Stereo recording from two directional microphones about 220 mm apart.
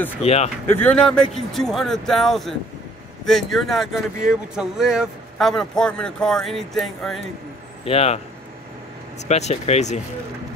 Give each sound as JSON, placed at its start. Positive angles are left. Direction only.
{"t": 0.2, "sound": "speech", "side_deg": 30}
{"t": 0.7, "sound": "speech", "side_deg": 5}
{"t": 7.8, "sound": "speech", "side_deg": 25}
{"t": 9.3, "sound": "speech", "side_deg": 30}